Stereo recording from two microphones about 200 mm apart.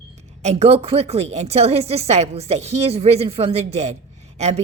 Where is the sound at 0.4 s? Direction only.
30° right (ahead or behind).